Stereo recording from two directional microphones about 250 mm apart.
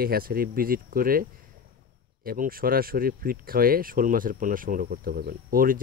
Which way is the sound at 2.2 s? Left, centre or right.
Right.